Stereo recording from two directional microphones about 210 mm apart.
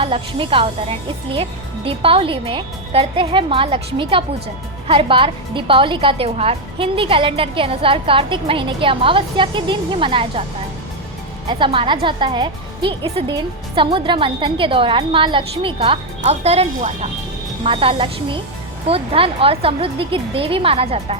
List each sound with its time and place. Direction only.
0.0 s speech: 25° right (ahead or behind)
11.4 s speech: 25° right (ahead or behind)